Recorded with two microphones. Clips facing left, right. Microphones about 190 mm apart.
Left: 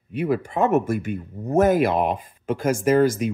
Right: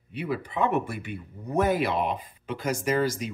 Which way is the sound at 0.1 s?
50° left (ahead or behind).